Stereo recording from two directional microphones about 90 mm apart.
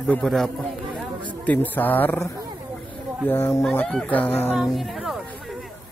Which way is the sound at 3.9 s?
15° left (ahead or behind).